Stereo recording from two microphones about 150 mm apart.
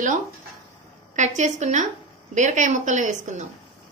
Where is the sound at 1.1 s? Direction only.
55° right (ahead or behind).